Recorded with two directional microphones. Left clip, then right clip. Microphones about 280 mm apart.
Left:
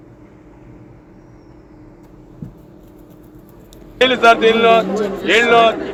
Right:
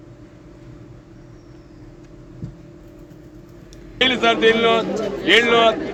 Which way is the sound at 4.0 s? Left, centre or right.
Right.